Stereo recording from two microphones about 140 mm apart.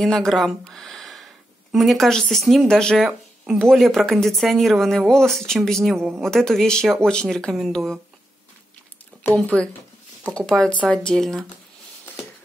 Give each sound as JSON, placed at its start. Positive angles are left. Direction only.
{"t": 0.0, "sound": "speech", "side_deg": 5}
{"t": 5.9, "sound": "speech", "side_deg": -20}
{"t": 6.2, "sound": "speech", "side_deg": 5}
{"t": 9.1, "sound": "a sound", "side_deg": 5}
{"t": 10.3, "sound": "speech", "side_deg": 5}